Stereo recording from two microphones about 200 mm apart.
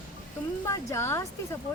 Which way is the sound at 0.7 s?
15° left (ahead or behind).